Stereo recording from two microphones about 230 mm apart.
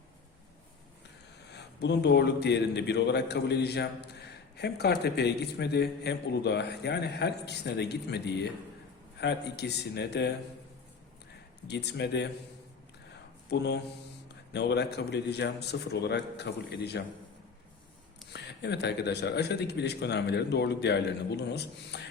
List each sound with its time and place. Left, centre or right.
1.5 s a man's voice: left
11.7 s a man's voice: left
13.5 s a man's voice: left
18.3 s a man's voice: left